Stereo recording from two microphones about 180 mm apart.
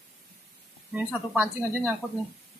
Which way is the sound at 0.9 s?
10° right (ahead or behind).